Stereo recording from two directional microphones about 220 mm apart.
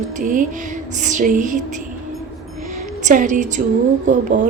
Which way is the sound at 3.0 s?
35° right (ahead or behind).